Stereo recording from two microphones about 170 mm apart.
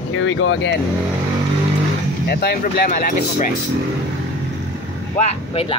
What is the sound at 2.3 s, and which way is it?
Speech, 70° left (ahead or behind).